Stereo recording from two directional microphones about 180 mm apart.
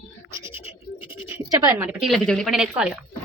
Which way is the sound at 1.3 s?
10° right (ahead or behind).